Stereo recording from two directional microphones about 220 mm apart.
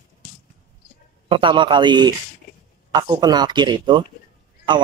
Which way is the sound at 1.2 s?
25° right (ahead or behind).